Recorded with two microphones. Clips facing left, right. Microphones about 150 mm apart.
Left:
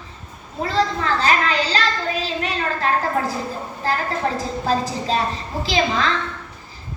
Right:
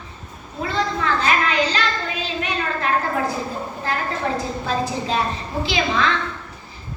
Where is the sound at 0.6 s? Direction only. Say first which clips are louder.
Left 2 dB; 35° left (ahead or behind).